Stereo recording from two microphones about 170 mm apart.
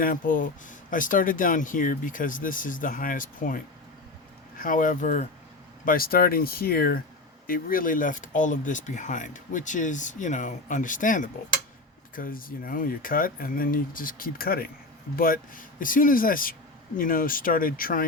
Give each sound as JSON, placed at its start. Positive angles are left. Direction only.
{"t": 0.0, "sound": "speech", "side_deg": 55}